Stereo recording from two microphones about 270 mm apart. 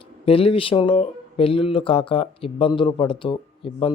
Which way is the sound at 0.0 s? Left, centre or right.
Centre.